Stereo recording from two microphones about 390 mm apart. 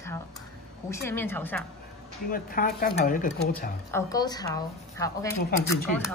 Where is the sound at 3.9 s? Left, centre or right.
Centre.